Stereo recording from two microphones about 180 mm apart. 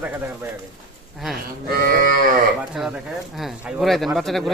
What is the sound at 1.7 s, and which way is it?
Livestock, 55° right (ahead or behind).